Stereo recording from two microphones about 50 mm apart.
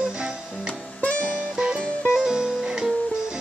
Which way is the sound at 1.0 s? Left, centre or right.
Left.